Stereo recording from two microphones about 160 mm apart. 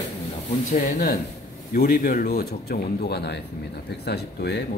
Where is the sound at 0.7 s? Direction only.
65° left (ahead or behind).